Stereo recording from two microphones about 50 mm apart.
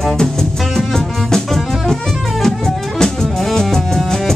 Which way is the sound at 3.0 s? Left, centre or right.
Centre.